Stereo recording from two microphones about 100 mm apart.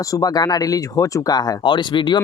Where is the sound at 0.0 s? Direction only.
35° left (ahead or behind).